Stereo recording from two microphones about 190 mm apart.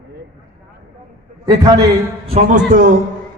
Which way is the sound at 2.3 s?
35° right (ahead or behind).